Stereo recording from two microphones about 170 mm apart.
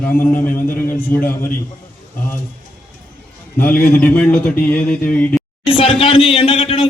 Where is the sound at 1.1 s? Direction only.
10° left (ahead or behind).